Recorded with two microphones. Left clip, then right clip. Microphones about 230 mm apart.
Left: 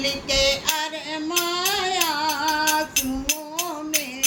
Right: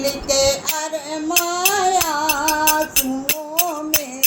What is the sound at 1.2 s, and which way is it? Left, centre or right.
Speech, centre.